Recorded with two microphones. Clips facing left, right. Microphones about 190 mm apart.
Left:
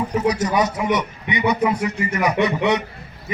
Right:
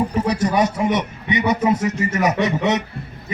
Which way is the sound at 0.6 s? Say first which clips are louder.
Right 2 dB; 25° right (ahead or behind).